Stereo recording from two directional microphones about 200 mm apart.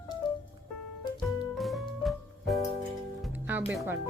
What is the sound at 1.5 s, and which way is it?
Music, centre (ahead or behind).